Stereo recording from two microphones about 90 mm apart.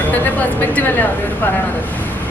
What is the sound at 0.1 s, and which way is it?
A woman's voice, 20° left (ahead or behind).